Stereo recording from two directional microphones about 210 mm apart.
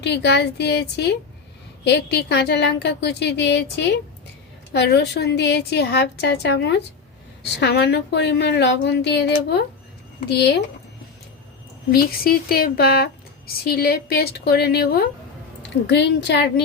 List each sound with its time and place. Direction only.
0.0 s a woman's voice: 55° left (ahead or behind)
11.9 s a woman's voice: 45° left (ahead or behind)